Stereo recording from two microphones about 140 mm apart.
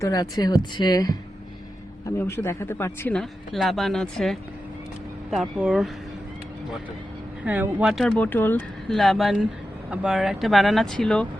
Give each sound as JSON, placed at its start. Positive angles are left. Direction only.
{"t": 0.0, "sound": "speech", "side_deg": 25}
{"t": 3.2, "sound": "speech", "side_deg": 0}
{"t": 7.4, "sound": "speech", "side_deg": -10}
{"t": 8.2, "sound": "speech", "side_deg": 15}
{"t": 8.9, "sound": "speech", "side_deg": 0}